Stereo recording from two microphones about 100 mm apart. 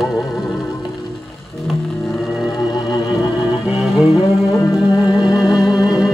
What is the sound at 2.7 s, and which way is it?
Music, 45° left (ahead or behind).